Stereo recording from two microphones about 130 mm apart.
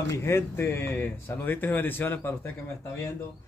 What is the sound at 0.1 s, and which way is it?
Speech, 20° left (ahead or behind).